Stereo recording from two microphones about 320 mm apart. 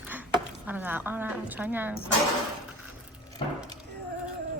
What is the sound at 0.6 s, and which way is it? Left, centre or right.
Speech, centre.